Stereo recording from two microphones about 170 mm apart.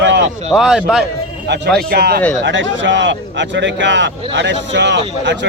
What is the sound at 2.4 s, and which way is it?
Speech, 90° right.